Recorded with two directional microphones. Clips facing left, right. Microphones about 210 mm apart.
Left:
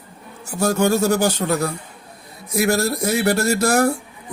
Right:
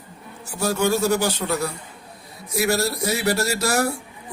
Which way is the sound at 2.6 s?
50° left (ahead or behind).